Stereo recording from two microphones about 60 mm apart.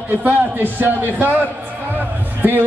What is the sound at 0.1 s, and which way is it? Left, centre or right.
A man's voice, right.